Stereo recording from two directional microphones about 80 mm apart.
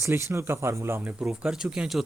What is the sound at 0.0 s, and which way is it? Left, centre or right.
Speech, right.